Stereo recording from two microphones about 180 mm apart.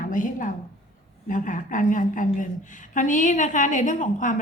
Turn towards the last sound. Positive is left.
turn(degrees=45)  # may be behind; listen again after turning